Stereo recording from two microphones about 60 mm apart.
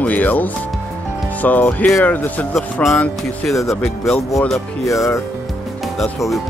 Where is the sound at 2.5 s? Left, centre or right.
Centre.